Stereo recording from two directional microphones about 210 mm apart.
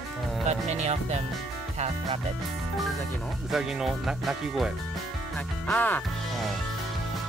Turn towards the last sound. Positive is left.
turn(degrees=5)  # may be behind; listen again after turning